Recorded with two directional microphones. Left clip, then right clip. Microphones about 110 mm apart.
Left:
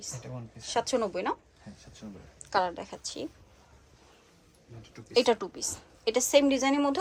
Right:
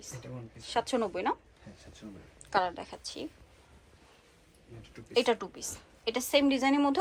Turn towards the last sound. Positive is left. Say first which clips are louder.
# left 1 dB
turn(degrees=25)  # may be behind; listen again after turning